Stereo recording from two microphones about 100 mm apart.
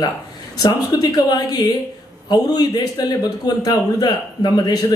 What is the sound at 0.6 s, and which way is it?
A woman's voice, 40° left (ahead or behind).